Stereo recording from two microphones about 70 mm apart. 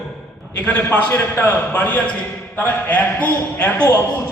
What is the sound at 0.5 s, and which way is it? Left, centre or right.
A man's voice, left.